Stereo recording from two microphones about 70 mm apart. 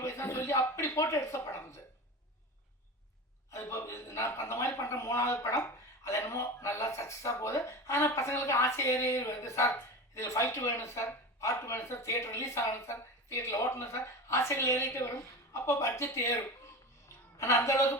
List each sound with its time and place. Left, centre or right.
0.0 s a sound: left
0.9 s speech: left
3.5 s speech: left
5.6 s speech: left